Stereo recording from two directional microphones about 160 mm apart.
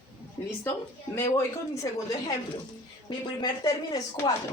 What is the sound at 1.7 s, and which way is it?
Speech, 20° left (ahead or behind).